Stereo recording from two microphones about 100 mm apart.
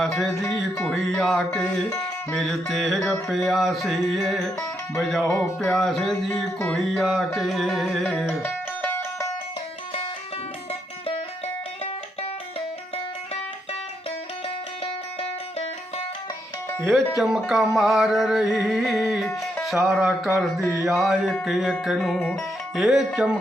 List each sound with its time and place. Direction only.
0.0 s music: 5° left (ahead or behind)
8.4 s music: 25° left (ahead or behind)
17.2 s music: 5° right (ahead or behind)